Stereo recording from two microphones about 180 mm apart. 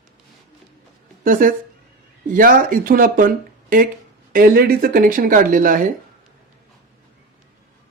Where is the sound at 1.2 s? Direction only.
50° right (ahead or behind).